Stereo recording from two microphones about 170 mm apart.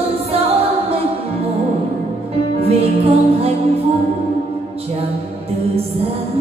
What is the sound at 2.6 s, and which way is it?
Music, 35° right (ahead or behind).